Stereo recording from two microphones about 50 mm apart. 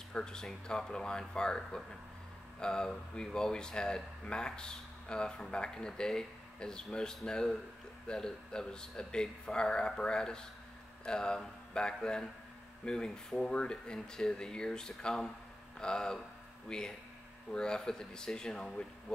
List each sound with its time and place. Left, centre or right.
0.1 s speech: centre